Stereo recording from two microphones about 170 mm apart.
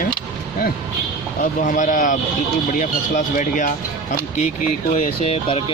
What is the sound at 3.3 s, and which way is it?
Speech, 50° left (ahead or behind).